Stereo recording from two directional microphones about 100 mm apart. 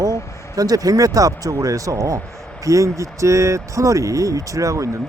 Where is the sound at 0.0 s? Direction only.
35° right (ahead or behind).